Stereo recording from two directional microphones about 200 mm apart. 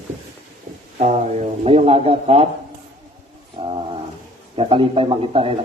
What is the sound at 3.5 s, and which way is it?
Wild animals, 25° right (ahead or behind).